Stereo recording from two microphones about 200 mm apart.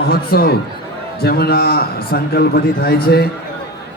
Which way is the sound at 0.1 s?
50° left (ahead or behind).